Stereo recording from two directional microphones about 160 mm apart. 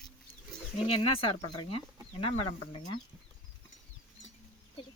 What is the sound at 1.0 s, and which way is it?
Speech, 35° left (ahead or behind).